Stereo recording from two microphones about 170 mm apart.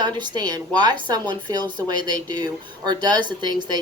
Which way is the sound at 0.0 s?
25° right (ahead or behind).